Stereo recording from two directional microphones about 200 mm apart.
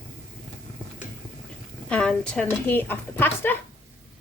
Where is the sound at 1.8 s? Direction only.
5° left (ahead or behind).